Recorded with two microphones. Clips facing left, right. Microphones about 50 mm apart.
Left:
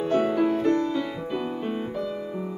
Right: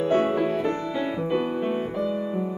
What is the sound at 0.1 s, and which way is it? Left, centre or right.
Music, right.